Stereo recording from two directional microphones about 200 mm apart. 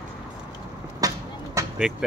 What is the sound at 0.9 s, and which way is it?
Vehicle, 15° right (ahead or behind).